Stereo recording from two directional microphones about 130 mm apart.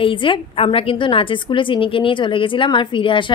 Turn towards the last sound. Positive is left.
turn(degrees=40)  # may be behind; listen again after turning